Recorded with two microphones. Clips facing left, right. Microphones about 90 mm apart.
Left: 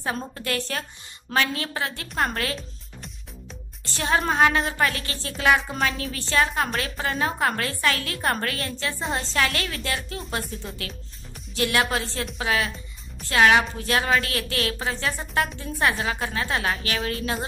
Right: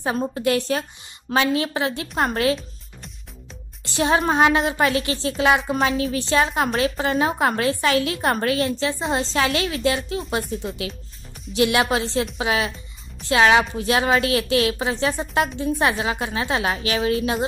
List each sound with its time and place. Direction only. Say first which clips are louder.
0.0 s a woman's voice: right 7 dB; 15° right (ahead or behind)
3.8 s a woman's voice: right 4 dB; 20° right (ahead or behind)